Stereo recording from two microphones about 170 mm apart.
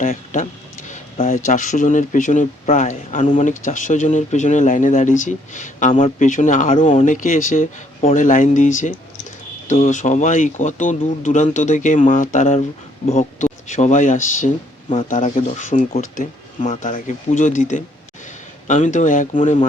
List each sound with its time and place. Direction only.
0.0 s speech: 50° left (ahead or behind)